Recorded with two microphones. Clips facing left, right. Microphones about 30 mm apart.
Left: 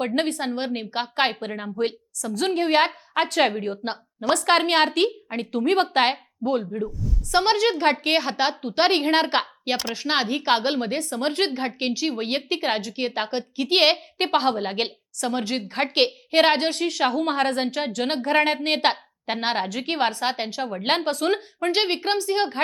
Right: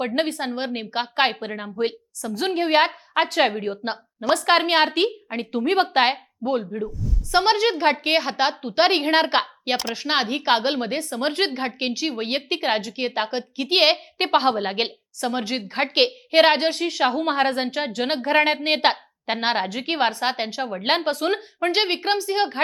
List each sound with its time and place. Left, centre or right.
0.0 s a woman's voice: centre